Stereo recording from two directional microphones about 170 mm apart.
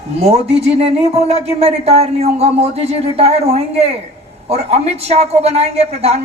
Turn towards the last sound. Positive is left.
turn(degrees=-40)  # may be behind; listen again after turning